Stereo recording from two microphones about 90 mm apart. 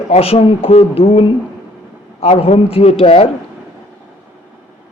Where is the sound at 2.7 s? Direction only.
90° left.